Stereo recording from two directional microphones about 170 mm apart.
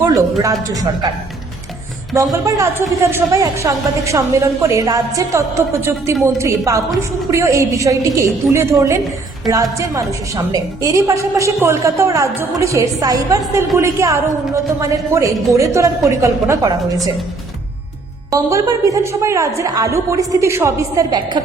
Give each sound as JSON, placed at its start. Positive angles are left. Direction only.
{"t": 0.0, "sound": "a woman's voice", "side_deg": -20}
{"t": 2.1, "sound": "a woman's voice", "side_deg": -20}
{"t": 18.3, "sound": "a woman's voice", "side_deg": -20}